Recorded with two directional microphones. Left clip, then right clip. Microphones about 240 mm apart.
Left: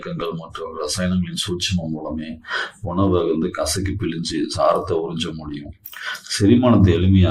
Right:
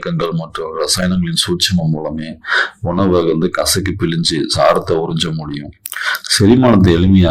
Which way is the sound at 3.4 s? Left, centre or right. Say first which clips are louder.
Right 7 dB; right.